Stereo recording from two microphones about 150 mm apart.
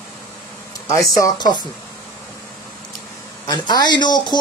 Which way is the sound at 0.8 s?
20° left (ahead or behind).